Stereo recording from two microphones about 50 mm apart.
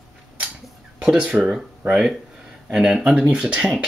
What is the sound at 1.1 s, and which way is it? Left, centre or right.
Speech, right.